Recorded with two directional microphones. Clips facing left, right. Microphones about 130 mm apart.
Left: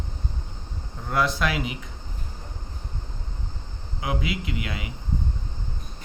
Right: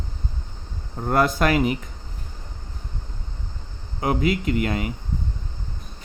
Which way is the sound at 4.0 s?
45° right (ahead or behind).